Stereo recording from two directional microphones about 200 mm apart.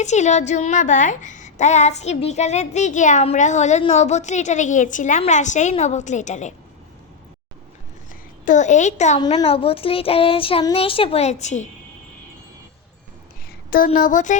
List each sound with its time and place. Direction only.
0.0 s a child's voice: 35° left (ahead or behind)
8.4 s a child's voice: 35° left (ahead or behind)
13.7 s a child's voice: 45° left (ahead or behind)